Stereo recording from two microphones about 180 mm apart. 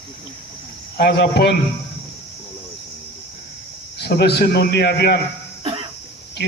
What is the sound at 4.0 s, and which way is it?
A man's voice, 65° left (ahead or behind).